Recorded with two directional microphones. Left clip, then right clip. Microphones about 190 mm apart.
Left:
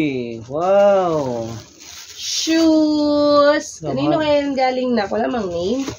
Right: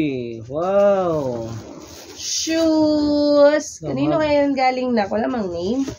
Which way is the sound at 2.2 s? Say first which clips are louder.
Left 3 dB; 30° right (ahead or behind).